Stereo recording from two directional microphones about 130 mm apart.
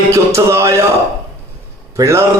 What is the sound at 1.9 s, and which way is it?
Speech, 25° right (ahead or behind).